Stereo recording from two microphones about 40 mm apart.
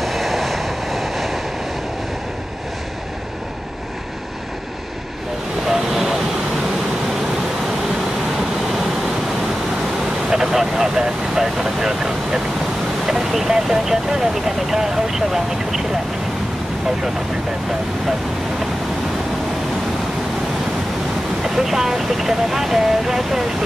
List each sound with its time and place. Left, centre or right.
0.0 s vehicle: centre
5.7 s vehicle: centre
8.6 s vehicle: centre
10.3 s vehicle: centre
21.4 s speech: centre